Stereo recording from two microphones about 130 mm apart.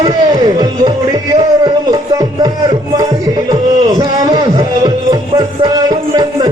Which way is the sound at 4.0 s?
30° right (ahead or behind).